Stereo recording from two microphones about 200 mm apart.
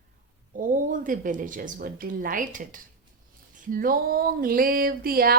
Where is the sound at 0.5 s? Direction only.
40° right (ahead or behind).